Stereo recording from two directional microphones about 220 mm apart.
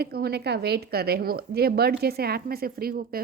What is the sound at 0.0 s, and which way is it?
Speech, 45° right (ahead or behind).